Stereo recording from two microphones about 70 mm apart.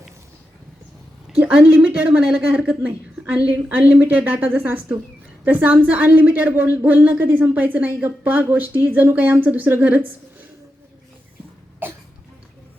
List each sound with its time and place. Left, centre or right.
1.3 s a woman's voice: centre
11.8 s cough: right